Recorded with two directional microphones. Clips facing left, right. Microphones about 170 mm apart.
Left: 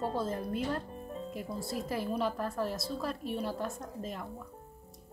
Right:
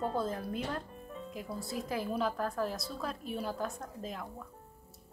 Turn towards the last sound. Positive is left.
turn(degrees=0)  # may be behind; listen again after turning